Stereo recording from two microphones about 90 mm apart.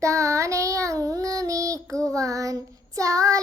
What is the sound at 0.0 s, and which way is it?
Child singing, 35° right (ahead or behind).